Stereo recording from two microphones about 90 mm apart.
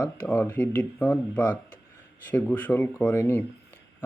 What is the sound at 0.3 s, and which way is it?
Speech, 20° left (ahead or behind).